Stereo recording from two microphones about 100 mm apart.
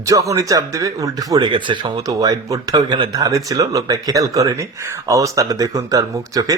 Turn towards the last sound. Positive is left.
turn(degrees=-35)  # may be behind; listen again after turning